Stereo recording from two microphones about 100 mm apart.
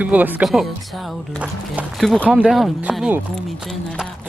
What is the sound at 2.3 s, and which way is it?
Speech, 5° right (ahead or behind).